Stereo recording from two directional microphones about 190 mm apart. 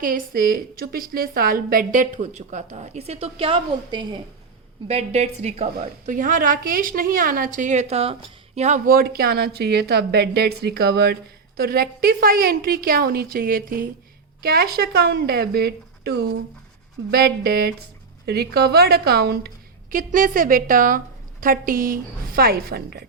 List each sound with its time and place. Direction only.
0.0 s a woman's voice: 50° right (ahead or behind)